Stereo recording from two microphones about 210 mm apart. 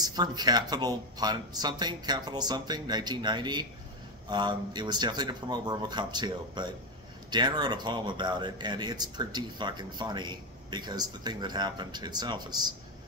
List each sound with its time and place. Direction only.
0.0 s speech: 20° right (ahead or behind)